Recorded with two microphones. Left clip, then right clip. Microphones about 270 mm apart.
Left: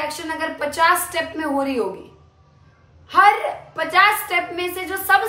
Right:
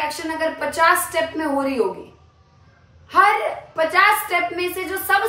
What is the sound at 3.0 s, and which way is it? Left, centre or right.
A woman's voice, centre.